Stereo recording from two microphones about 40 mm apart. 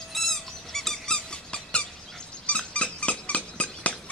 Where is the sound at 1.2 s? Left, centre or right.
Left.